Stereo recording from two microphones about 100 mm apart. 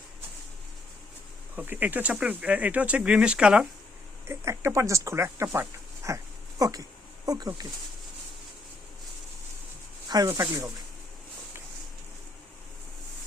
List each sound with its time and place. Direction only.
1.5 s speech: 15° right (ahead or behind)
4.3 s speech: 30° right (ahead or behind)
5.5 s a sound: 30° right (ahead or behind)
6.6 s speech: 35° right (ahead or behind)
10.1 s speech: 35° right (ahead or behind)